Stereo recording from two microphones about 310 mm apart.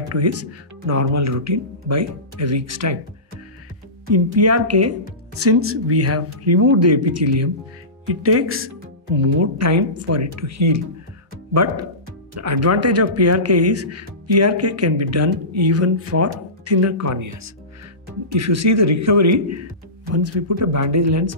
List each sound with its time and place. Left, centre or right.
0.1 s speech: right
4.1 s speech: right
9.6 s speech: right